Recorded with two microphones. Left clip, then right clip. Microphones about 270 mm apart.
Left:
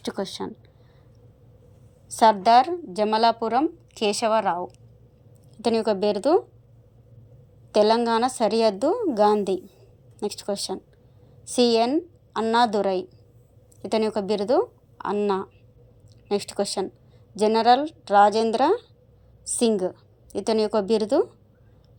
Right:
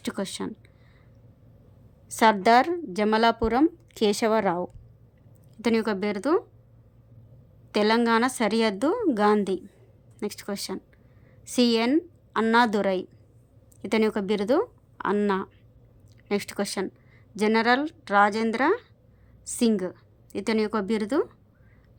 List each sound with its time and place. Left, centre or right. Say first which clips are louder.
0.0 s a woman's voice: left 2 dB; right
2.4 s a woman's voice: left 2 dB; centre
5.6 s a woman's voice: left 4 dB; centre
7.7 s a woman's voice: left 3 dB; centre